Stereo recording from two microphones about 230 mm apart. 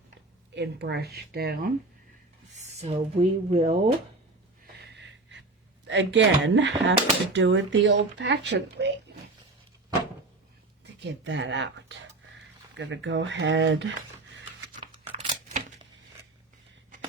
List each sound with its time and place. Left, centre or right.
0.5 s speech: right
2.6 s speech: right
4.6 s wheeze: right
5.9 s speech: right
11.0 s speech: right
15.1 s a sound: right